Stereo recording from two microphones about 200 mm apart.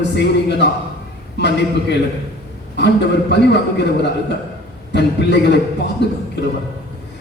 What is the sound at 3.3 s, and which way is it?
Speech, 55° left (ahead or behind).